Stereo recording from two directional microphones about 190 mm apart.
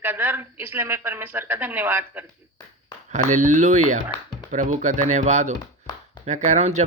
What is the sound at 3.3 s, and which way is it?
Speech, 40° right (ahead or behind).